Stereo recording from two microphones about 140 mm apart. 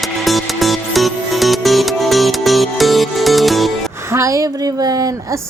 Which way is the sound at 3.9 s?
20° right (ahead or behind).